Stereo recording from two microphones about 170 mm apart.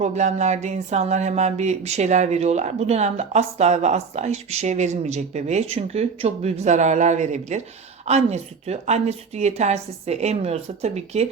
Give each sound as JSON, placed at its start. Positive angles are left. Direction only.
{"t": 0.0, "sound": "speech", "side_deg": -40}